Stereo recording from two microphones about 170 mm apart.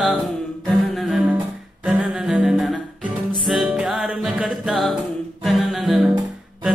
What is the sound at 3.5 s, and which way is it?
Music, centre (ahead or behind).